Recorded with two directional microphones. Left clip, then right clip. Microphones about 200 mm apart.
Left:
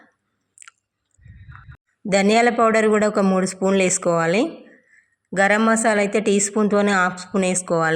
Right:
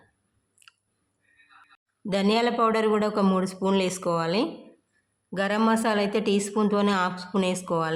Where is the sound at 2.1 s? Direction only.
20° left (ahead or behind).